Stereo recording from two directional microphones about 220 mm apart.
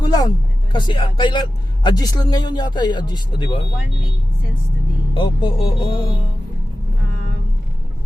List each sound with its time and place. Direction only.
0.0 s speech: 20° left (ahead or behind)
5.1 s speech: 20° left (ahead or behind)